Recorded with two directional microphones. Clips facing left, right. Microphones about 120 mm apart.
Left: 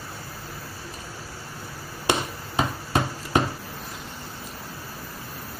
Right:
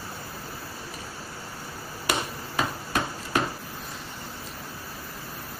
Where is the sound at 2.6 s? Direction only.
25° left (ahead or behind).